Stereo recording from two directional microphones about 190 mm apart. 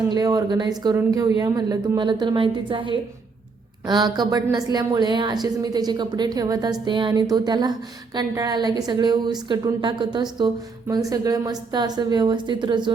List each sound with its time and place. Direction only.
0.1 s a woman's voice: 20° right (ahead or behind)